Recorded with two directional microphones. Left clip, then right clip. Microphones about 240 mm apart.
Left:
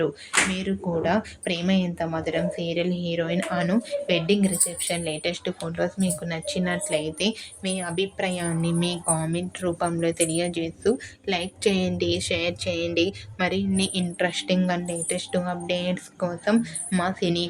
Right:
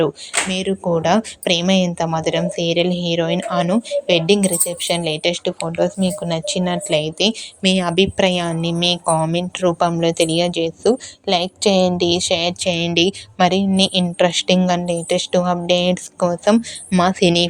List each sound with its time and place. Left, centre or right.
0.5 s a woman's voice: right
7.6 s a woman's voice: right